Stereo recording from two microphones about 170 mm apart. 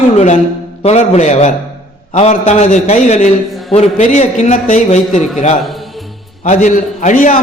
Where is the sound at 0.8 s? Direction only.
40° left (ahead or behind).